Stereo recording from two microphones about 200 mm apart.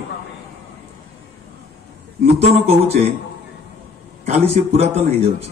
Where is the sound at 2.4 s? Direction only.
30° right (ahead or behind).